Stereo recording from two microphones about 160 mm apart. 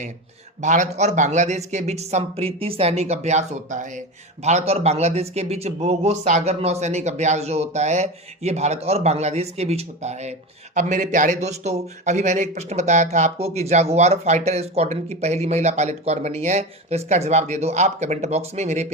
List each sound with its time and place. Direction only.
0.6 s speech: 50° right (ahead or behind)